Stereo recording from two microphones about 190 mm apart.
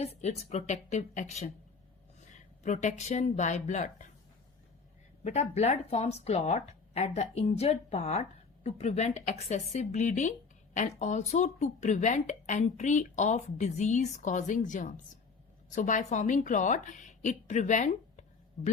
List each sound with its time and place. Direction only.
0.0 s speech: 35° left (ahead or behind)
5.2 s a woman's voice: 35° left (ahead or behind)